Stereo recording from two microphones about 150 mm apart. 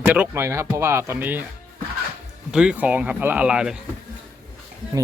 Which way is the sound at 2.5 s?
5° right (ahead or behind).